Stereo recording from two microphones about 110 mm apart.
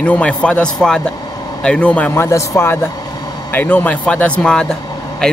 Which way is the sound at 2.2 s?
25° left (ahead or behind).